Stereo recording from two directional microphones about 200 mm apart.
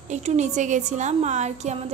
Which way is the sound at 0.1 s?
35° right (ahead or behind).